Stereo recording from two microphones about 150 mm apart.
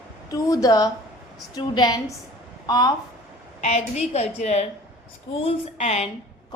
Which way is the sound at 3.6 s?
45° left (ahead or behind).